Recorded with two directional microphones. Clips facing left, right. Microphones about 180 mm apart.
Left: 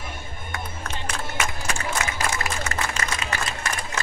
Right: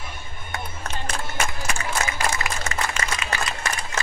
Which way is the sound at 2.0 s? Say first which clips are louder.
Right 1 dB; 40° right (ahead or behind).